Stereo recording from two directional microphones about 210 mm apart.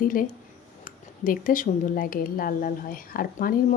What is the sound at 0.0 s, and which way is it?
Speech, 40° left (ahead or behind).